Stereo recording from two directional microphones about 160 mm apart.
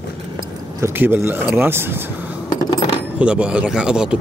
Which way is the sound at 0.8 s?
15° right (ahead or behind).